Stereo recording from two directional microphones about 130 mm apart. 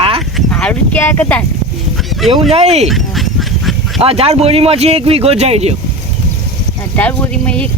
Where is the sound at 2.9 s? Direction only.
Centre (ahead or behind).